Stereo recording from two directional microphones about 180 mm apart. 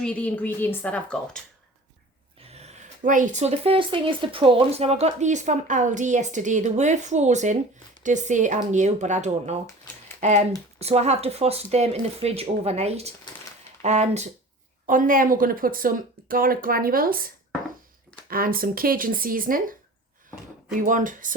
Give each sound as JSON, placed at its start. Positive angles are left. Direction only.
{"t": 0.0, "sound": "speech", "side_deg": 5}
{"t": 2.4, "sound": "speech", "side_deg": -35}
{"t": 14.8, "sound": "speech", "side_deg": -50}
{"t": 20.7, "sound": "speech", "side_deg": -45}